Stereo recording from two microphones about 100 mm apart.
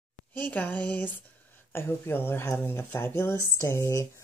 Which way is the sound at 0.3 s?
15° left (ahead or behind).